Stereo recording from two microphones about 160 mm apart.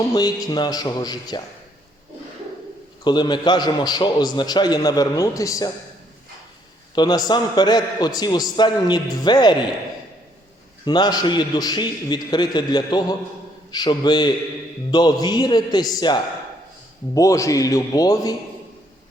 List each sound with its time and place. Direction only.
0.1 s a man's voice: 25° left (ahead or behind)
3.0 s a man's voice: 30° left (ahead or behind)
6.9 s a man's voice: 25° left (ahead or behind)
10.8 s a man's voice: 25° left (ahead or behind)